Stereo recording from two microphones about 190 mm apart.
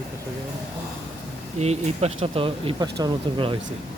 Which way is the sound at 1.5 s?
35° right (ahead or behind).